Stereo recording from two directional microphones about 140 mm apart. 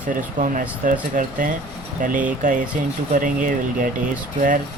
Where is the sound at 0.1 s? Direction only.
70° right (ahead or behind).